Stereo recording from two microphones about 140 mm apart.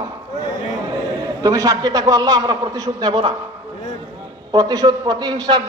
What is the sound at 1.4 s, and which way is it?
A man's voice, 25° right (ahead or behind).